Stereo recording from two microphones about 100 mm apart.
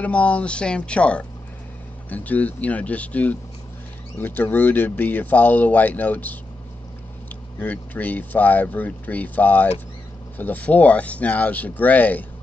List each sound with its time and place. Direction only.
0.0 s speech: 10° left (ahead or behind)